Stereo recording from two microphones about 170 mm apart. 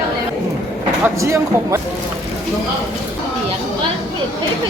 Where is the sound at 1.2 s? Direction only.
15° right (ahead or behind).